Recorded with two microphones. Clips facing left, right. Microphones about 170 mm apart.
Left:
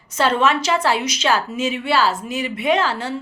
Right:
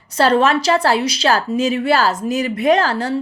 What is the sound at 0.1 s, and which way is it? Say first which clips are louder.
A woman's voice: right 4 dB; 35° right (ahead or behind).